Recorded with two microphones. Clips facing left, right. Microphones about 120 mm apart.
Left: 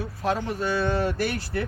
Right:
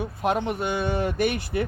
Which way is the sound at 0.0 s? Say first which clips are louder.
Right 2 dB; 20° right (ahead or behind).